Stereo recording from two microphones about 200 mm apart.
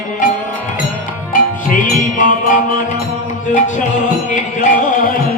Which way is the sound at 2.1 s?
40° left (ahead or behind).